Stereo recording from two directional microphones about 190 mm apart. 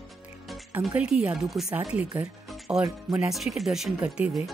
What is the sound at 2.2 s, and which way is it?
Music, 5° right (ahead or behind).